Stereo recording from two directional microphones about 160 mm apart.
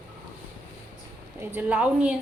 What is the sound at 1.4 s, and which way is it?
Speech, 10° right (ahead or behind).